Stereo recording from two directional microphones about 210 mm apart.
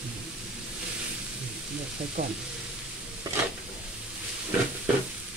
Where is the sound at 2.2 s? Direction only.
50° right (ahead or behind).